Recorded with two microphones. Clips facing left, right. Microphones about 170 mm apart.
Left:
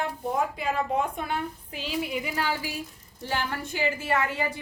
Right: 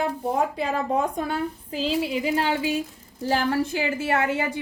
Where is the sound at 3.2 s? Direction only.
35° right (ahead or behind).